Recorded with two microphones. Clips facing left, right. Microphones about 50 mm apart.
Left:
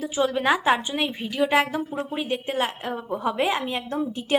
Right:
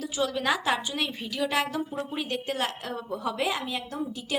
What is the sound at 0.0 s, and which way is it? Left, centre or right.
Speech, left.